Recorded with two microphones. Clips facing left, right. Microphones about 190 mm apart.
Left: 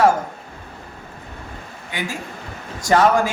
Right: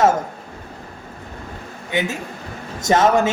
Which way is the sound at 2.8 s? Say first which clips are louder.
Even; 20° right (ahead or behind).